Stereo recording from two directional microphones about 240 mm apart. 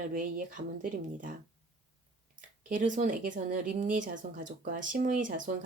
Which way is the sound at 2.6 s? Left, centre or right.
Right.